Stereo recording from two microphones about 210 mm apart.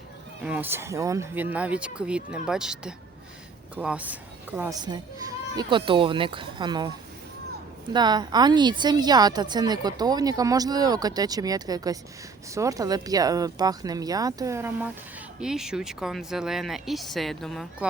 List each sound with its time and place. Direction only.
0.4 s a woman's voice: 10° right (ahead or behind)
7.9 s a woman's voice: 20° right (ahead or behind); by 17.8 s centre (ahead or behind)